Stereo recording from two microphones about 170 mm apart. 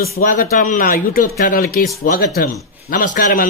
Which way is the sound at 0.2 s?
55° left (ahead or behind).